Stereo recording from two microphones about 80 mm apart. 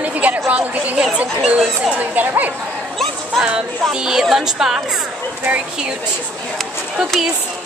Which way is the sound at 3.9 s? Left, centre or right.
Centre.